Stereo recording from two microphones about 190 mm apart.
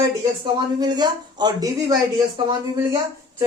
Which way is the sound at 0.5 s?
20° right (ahead or behind).